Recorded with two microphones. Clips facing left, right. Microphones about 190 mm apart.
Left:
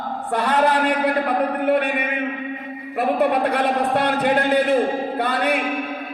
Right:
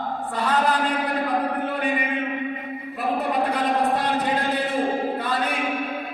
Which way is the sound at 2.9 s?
65° left (ahead or behind).